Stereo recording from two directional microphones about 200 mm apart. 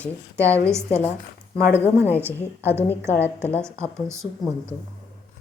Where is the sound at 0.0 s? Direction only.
15° right (ahead or behind).